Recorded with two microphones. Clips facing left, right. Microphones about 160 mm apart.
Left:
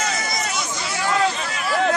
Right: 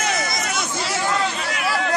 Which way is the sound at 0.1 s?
55° right (ahead or behind).